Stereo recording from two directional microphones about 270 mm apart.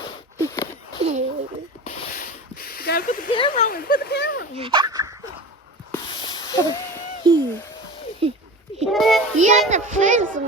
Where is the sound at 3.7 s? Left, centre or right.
Left.